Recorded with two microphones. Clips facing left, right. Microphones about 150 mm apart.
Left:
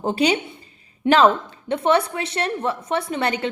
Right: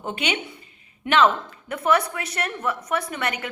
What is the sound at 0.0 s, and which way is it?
A woman's voice, 35° left (ahead or behind).